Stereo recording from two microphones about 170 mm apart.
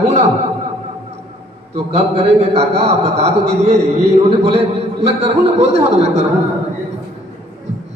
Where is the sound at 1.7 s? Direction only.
35° right (ahead or behind).